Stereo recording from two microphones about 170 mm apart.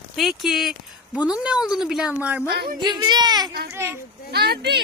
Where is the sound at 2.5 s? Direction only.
65° right (ahead or behind).